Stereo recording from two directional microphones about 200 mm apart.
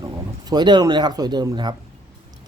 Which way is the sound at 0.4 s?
20° right (ahead or behind).